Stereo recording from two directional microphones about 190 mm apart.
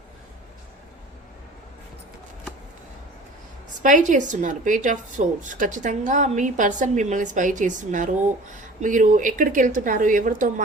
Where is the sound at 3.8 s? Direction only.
40° right (ahead or behind).